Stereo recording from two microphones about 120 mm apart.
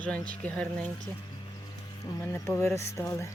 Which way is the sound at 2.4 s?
25° left (ahead or behind).